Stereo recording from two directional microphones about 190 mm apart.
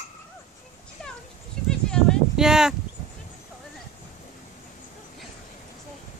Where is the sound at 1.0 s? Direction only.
5° left (ahead or behind).